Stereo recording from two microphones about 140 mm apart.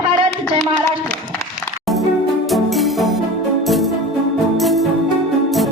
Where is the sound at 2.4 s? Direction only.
Centre (ahead or behind).